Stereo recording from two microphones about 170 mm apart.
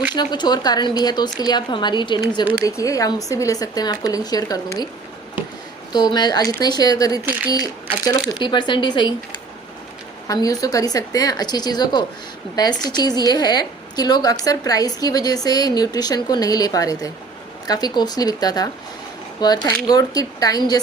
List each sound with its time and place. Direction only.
0.1 s a woman's voice: 25° left (ahead or behind)
2.4 s speech: 10° right (ahead or behind)
2.6 s a woman's voice: 20° left (ahead or behind)
5.9 s a woman's voice: 25° left (ahead or behind)
7.2 s speech: 10° right (ahead or behind)
7.5 s a woman's voice: 25° left (ahead or behind)
10.2 s a woman's voice: 20° left (ahead or behind)